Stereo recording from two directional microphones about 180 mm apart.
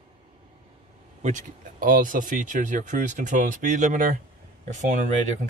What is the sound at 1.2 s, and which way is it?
Speech, 45° right (ahead or behind).